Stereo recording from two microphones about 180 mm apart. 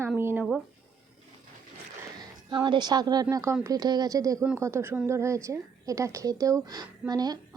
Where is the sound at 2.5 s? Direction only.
25° right (ahead or behind).